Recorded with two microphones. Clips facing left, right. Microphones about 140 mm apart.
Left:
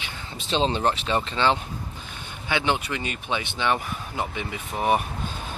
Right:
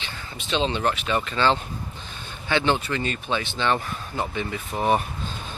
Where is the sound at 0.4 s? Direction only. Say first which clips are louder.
Left 1 dB; 35° left (ahead or behind).